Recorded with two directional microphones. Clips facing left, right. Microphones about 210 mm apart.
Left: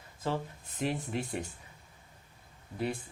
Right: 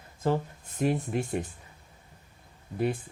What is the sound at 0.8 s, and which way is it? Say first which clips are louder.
Speech: right 6 dB; 50° right (ahead or behind).